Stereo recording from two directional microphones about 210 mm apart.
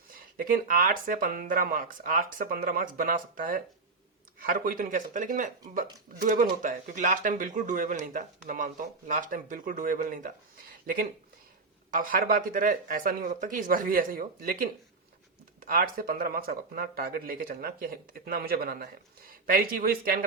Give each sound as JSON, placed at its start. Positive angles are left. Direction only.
{"t": 0.1, "sound": "speech", "side_deg": -45}